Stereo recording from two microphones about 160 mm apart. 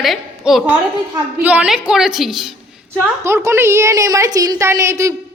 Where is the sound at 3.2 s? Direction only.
15° right (ahead or behind).